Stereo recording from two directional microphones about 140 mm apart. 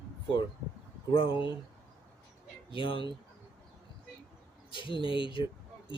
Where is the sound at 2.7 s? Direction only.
35° left (ahead or behind).